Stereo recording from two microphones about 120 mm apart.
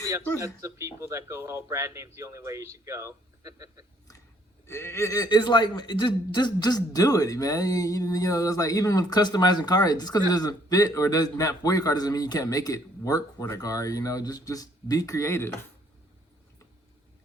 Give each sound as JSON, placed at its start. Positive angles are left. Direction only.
{"t": 0.3, "sound": "a man's voice", "side_deg": -25}
{"t": 4.6, "sound": "a man's voice", "side_deg": 20}